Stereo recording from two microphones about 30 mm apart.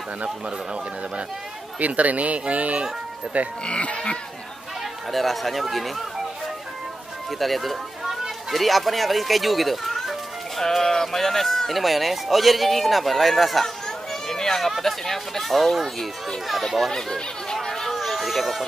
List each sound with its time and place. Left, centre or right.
1.8 s speech: right
3.6 s speech: left
5.1 s speech: centre
7.2 s speech: centre
10.6 s speech: centre
11.7 s speech: centre
14.3 s run: centre
14.8 s speech: centre
16.9 s chatter: centre
17.8 s a sound: centre